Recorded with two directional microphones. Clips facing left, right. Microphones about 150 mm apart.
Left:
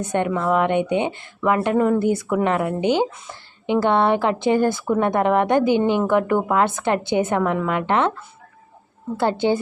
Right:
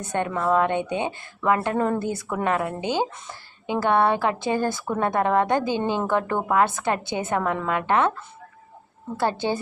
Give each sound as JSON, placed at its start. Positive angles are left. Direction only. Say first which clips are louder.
{"t": 0.0, "sound": "a woman's voice", "louder": "left 4 dB", "side_deg": 20}
{"t": 9.1, "sound": "speech", "louder": "left 5 dB", "side_deg": 15}